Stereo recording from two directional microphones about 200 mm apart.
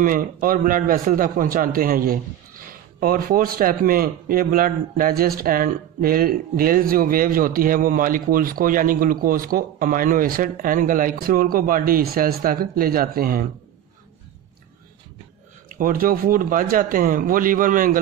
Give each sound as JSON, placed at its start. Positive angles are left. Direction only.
{"t": 0.0, "sound": "a man's voice", "side_deg": -45}
{"t": 15.8, "sound": "a man's voice", "side_deg": -45}